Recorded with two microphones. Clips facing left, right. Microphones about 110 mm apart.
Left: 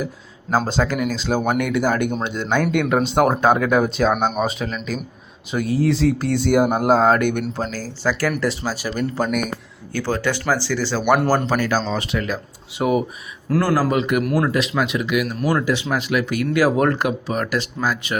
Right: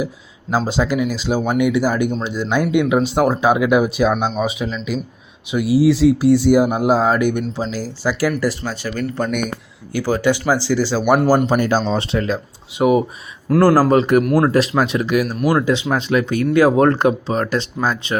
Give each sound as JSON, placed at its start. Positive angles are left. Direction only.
{"t": 0.7, "sound": "speech", "side_deg": -10}
{"t": 8.4, "sound": "speech", "side_deg": 0}
{"t": 9.9, "sound": "speech", "side_deg": -10}
{"t": 13.6, "sound": "speech", "side_deg": -35}
{"t": 15.4, "sound": "speech", "side_deg": -20}